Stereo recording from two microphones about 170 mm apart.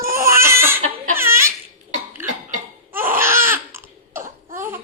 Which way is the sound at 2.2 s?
15° right (ahead or behind).